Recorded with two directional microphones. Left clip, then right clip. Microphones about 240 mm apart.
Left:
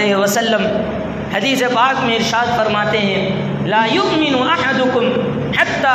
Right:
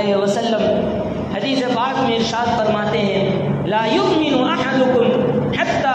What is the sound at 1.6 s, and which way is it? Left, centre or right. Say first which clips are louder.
Speech: left 4 dB; left.